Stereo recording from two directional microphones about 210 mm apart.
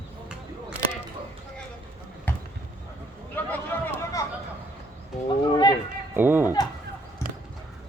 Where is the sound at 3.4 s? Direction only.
10° left (ahead or behind).